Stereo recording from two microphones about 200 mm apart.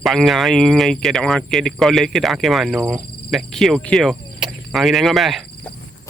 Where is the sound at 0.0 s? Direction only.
Centre (ahead or behind).